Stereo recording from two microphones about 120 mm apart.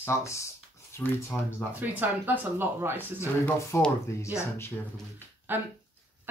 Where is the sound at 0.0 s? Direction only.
25° left (ahead or behind).